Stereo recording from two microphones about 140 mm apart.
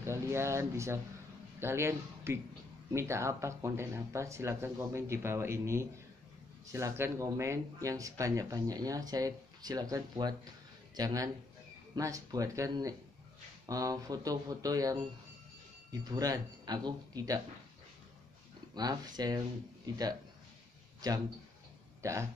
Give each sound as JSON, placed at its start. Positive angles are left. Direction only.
{"t": 0.0, "sound": "speech", "side_deg": -20}
{"t": 18.8, "sound": "speech", "side_deg": -30}
{"t": 21.0, "sound": "speech", "side_deg": -30}